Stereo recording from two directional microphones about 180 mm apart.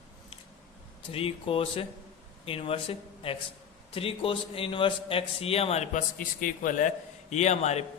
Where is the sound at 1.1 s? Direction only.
30° left (ahead or behind).